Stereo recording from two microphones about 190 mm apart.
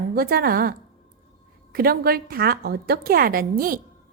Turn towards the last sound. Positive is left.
turn(degrees=-50)  # may be behind; listen again after turning